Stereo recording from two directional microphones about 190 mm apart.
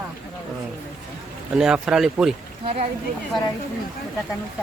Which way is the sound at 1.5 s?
5° right (ahead or behind).